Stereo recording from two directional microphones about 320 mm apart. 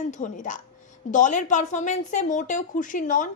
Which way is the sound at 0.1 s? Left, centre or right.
Left.